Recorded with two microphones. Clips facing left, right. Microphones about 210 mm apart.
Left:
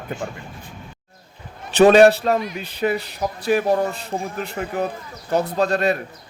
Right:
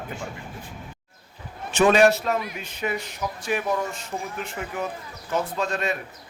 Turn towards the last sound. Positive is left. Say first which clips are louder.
# left 7 dB
turn(degrees=35)  # may be behind; listen again after turning